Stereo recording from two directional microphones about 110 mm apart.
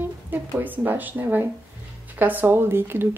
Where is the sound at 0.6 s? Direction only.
15° right (ahead or behind).